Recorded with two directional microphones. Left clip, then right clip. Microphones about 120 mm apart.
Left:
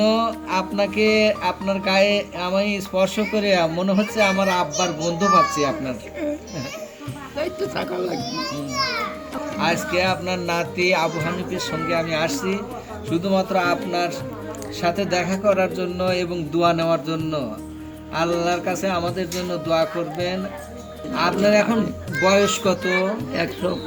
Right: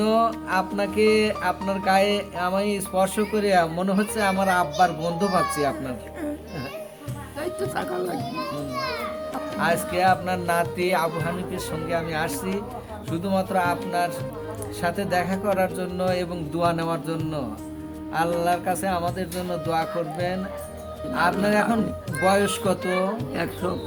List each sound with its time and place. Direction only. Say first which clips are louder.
0.0 s music: left 2 dB; 45° right (ahead or behind)
7.8 s a child's voice: left 2 dB; 25° right (ahead or behind)
9.6 s music: left 2 dB; 50° right (ahead or behind)
14.8 s music: left 3 dB; 50° right (ahead or behind)
23.3 s a child's voice: left 4 dB; 25° right (ahead or behind)